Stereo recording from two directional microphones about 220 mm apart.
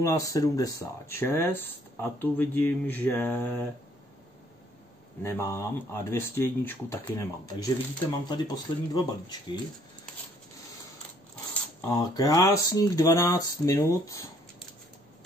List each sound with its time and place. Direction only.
0.0 s speech: 15° left (ahead or behind)
5.2 s speech: 10° left (ahead or behind)
11.9 s speech: 15° left (ahead or behind)